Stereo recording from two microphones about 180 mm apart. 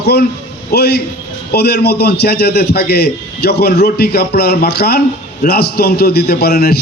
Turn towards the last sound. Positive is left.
turn(degrees=60)  # may be behind; listen again after turning